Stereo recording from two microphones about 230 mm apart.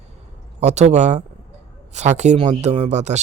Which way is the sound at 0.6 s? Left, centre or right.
Right.